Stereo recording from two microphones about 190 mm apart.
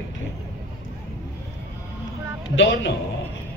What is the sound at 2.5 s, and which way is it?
Speech, 75° left (ahead or behind).